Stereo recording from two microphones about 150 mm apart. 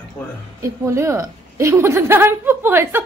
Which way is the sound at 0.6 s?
20° right (ahead or behind).